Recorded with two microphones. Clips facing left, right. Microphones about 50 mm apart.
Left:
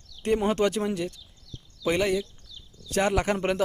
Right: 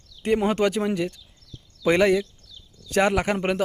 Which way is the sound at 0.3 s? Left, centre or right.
Right.